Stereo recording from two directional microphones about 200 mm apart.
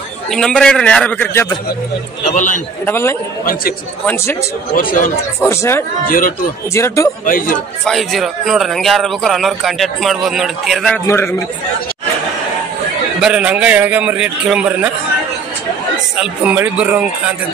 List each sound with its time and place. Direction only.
0.3 s a man's voice: centre (ahead or behind)
2.2 s a man's voice: 40° left (ahead or behind)
2.8 s speech: 10° left (ahead or behind)
5.4 s speech: 15° left (ahead or behind)
6.0 s a man's voice: 45° left (ahead or behind)
6.7 s speech: 15° left (ahead or behind)
7.2 s a man's voice: 45° left (ahead or behind)
7.8 s a man's voice: centre (ahead or behind)
11.1 s speech: 15° left (ahead or behind)
13.2 s a man's voice: 5° right (ahead or behind)
16.2 s a man's voice: 5° right (ahead or behind)